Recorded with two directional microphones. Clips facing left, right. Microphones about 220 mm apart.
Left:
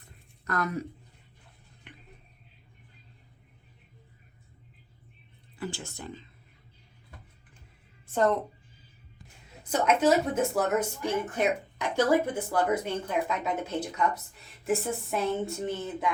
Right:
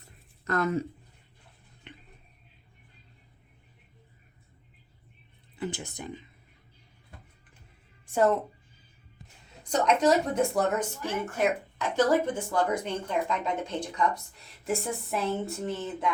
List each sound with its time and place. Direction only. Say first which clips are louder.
0.4 s speech: right 4 dB; 25° right (ahead or behind)
1.9 s a sound: right 3 dB; 25° right (ahead or behind)
5.5 s speech: right 2 dB; 20° right (ahead or behind)
8.0 s a woman's voice: right 1 dB; 10° right (ahead or behind)
9.6 s speech: even; 5° left (ahead or behind)
11.0 s speech: left 1 dB; 15° left (ahead or behind)